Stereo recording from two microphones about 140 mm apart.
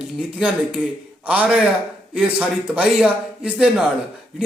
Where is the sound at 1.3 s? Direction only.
10° right (ahead or behind).